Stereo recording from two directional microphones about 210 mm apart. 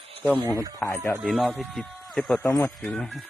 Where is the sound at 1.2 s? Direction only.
Centre (ahead or behind).